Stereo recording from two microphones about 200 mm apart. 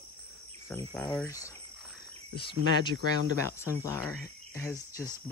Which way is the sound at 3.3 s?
15° left (ahead or behind).